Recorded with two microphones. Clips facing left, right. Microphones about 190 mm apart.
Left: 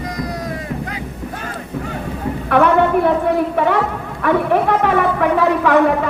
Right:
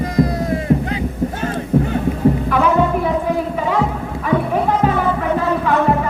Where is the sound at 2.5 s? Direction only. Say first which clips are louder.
Left 2 dB; 65° left (ahead or behind).